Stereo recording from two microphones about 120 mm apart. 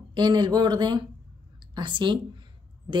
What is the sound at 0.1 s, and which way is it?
A woman's voice, 40° right (ahead or behind).